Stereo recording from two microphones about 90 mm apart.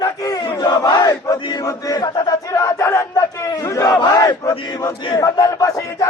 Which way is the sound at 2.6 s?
30° left (ahead or behind).